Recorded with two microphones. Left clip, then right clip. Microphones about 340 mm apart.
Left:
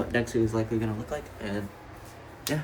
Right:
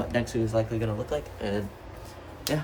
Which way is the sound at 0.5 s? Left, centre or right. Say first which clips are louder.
Right 2 dB; centre.